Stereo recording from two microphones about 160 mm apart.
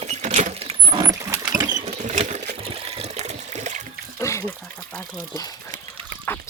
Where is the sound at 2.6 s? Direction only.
40° right (ahead or behind).